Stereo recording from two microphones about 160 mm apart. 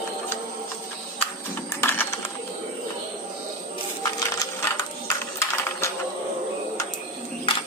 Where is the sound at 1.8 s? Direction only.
15° left (ahead or behind).